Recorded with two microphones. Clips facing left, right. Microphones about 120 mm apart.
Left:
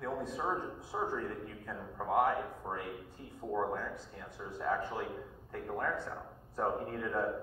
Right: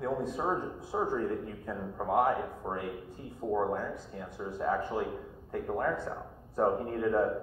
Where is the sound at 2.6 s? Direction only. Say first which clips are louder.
Right 4 dB; 30° right (ahead or behind).